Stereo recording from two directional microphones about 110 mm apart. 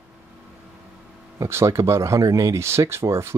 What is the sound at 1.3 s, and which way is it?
Speech, 30° right (ahead or behind).